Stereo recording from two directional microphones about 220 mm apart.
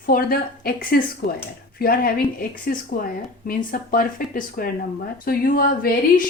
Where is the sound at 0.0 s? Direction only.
40° left (ahead or behind).